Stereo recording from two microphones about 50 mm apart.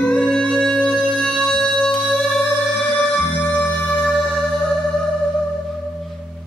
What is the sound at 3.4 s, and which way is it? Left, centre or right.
Music, left.